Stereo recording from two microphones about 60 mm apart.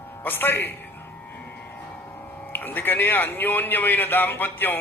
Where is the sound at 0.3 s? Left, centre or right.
Left.